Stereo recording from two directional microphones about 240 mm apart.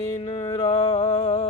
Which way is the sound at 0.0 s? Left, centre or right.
Left.